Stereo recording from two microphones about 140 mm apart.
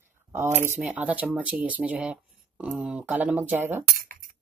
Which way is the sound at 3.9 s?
75° right (ahead or behind).